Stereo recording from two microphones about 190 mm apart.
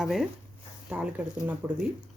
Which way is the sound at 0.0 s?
Centre (ahead or behind).